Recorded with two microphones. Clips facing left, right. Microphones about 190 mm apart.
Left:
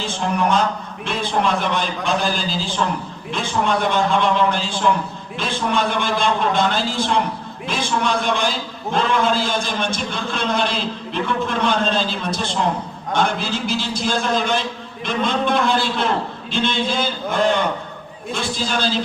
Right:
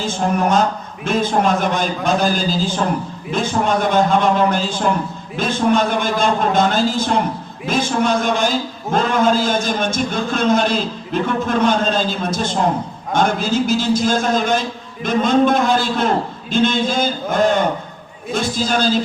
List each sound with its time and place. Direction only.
0.0 s a man's voice: 45° right (ahead or behind)